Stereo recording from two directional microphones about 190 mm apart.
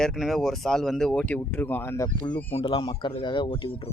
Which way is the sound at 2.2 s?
25° left (ahead or behind).